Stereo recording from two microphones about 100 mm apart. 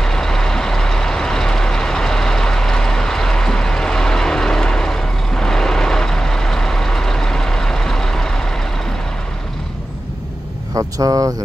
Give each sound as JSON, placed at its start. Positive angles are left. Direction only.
{"t": 0.0, "sound": "vehicle", "side_deg": 5}
{"t": 10.7, "sound": "speech", "side_deg": -35}